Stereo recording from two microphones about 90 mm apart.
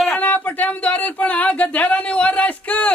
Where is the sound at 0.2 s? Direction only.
20° left (ahead or behind).